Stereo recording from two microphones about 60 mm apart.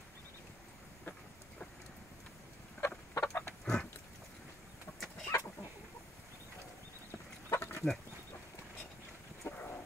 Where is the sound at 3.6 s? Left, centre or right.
Centre.